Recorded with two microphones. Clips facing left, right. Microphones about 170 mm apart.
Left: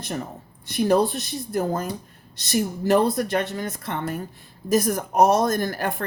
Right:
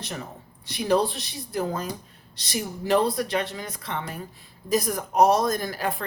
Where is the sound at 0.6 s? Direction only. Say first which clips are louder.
Left 3 dB; 50° left (ahead or behind).